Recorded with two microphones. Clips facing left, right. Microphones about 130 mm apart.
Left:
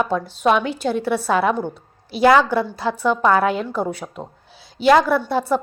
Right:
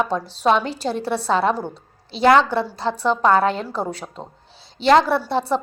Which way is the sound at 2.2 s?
5° left (ahead or behind).